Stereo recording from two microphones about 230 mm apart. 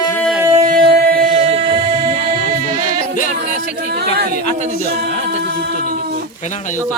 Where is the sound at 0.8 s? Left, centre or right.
Right.